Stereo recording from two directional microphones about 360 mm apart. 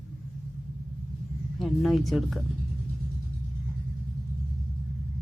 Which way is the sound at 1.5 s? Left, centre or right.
Centre.